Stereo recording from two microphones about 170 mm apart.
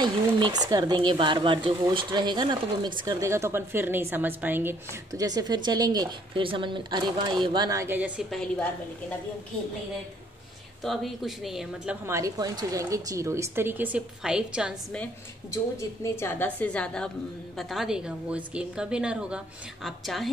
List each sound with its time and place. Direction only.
0.0 s a woman's voice: 25° right (ahead or behind)
10.8 s a woman's voice: centre (ahead or behind)
12.1 s a woman's voice: 20° right (ahead or behind)
15.5 s a woman's voice: 20° left (ahead or behind); by 20.2 s centre (ahead or behind)